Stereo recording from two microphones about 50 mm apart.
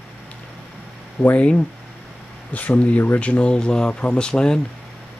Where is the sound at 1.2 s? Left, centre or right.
Left.